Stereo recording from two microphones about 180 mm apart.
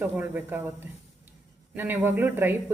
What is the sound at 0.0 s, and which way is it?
Speech, 10° right (ahead or behind).